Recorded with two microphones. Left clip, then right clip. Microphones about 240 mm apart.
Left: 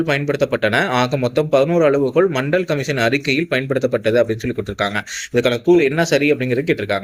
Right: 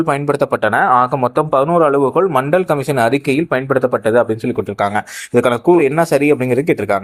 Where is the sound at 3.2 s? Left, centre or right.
Centre.